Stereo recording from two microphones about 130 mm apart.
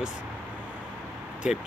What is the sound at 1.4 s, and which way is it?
Speech, 10° right (ahead or behind).